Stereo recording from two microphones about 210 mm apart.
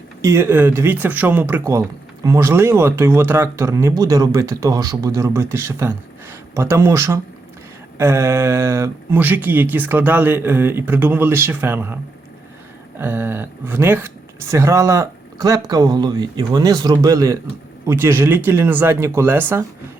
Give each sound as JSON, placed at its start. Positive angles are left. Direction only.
{"t": 0.2, "sound": "speech", "side_deg": -15}
{"t": 13.0, "sound": "speech", "side_deg": -10}